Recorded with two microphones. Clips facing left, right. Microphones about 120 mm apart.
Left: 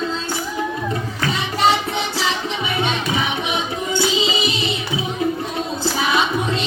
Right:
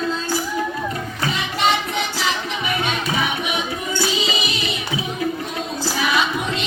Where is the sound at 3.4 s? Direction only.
20° left (ahead or behind).